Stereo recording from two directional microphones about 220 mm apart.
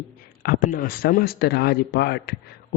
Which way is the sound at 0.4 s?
40° left (ahead or behind).